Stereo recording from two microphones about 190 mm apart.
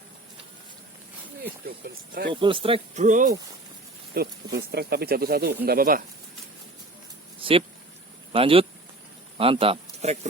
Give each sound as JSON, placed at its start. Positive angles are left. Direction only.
{"t": 1.6, "sound": "speech", "side_deg": -55}
{"t": 2.3, "sound": "speech", "side_deg": -25}
{"t": 4.1, "sound": "speech", "side_deg": -55}
{"t": 7.3, "sound": "a sound", "side_deg": -30}
{"t": 8.3, "sound": "speech", "side_deg": -30}